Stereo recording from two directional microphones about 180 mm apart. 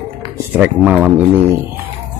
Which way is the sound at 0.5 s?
10° right (ahead or behind).